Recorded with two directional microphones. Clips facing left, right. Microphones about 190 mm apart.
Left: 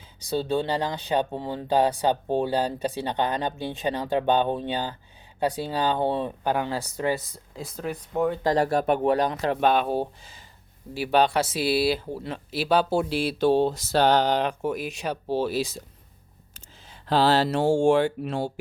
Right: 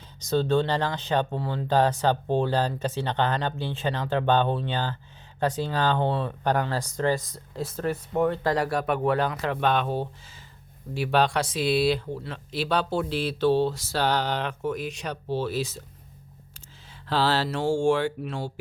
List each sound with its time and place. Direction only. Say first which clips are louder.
0.3 s speech: right 2 dB; 10° left (ahead or behind)
7.5 s speech: right 4 dB; centre (ahead or behind)
8.4 s speech: left 3 dB; 25° left (ahead or behind)